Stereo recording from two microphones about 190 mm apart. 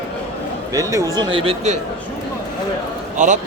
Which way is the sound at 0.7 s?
15° right (ahead or behind).